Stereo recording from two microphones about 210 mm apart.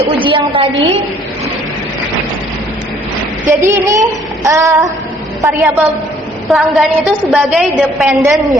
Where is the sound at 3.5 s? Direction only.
15° right (ahead or behind).